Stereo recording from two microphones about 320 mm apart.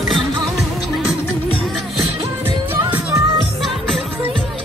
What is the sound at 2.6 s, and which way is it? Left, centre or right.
Music, centre.